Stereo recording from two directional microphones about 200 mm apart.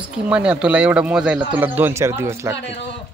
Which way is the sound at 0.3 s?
5° right (ahead or behind).